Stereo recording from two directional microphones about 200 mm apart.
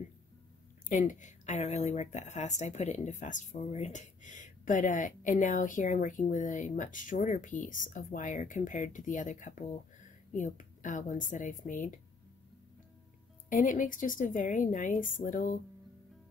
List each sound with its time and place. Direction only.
0.8 s speech: 40° left (ahead or behind)
13.5 s speech: 40° left (ahead or behind)